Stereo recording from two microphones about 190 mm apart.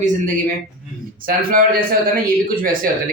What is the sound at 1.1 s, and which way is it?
A man's voice, 50° right (ahead or behind).